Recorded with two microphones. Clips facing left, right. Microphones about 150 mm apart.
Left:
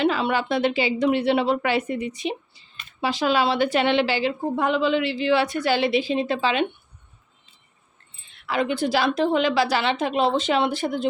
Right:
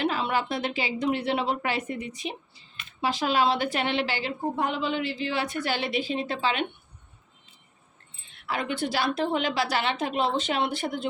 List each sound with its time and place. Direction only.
0.0 s a woman's voice: 90° left
3.0 s a woman's voice: 90° left
8.4 s a woman's voice: 90° left